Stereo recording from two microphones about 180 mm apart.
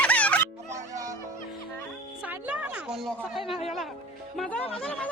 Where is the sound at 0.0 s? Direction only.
10° left (ahead or behind).